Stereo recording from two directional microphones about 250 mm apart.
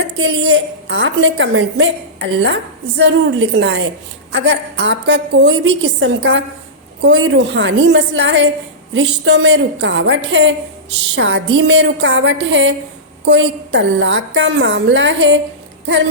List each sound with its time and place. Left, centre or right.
0.2 s a woman's voice: right